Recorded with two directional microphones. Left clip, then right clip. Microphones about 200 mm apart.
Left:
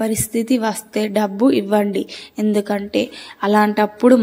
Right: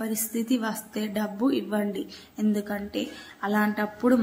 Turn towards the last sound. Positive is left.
turn(degrees=35)  # may be behind; listen again after turning